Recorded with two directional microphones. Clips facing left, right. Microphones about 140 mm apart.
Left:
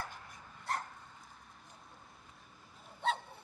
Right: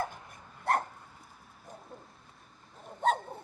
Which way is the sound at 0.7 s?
60° right (ahead or behind).